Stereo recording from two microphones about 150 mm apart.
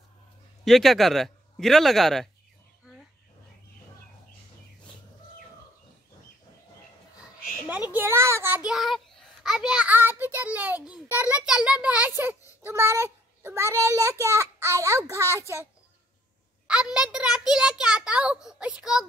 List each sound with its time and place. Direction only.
0.7 s a child's voice: centre (ahead or behind)
7.9 s a child's voice: 15° right (ahead or behind)
16.6 s a child's voice: 5° right (ahead or behind)